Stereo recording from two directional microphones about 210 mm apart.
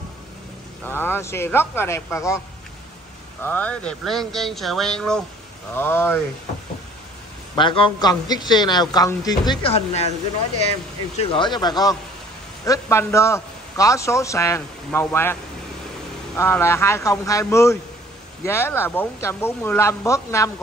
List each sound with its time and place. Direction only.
0.8 s a man's voice: 10° left (ahead or behind)
3.4 s a man's voice: 5° left (ahead or behind)
7.5 s a man's voice: 25° left (ahead or behind)
11.1 s a man's voice: 25° left (ahead or behind)
16.3 s a man's voice: 10° left (ahead or behind)